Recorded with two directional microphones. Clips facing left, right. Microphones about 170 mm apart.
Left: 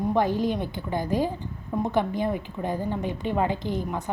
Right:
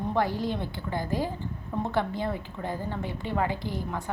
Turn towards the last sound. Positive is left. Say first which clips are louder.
# left 4 dB
turn(degrees=20)  # may be behind; listen again after turning